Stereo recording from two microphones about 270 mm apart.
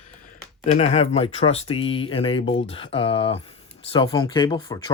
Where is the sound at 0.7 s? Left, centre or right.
Left.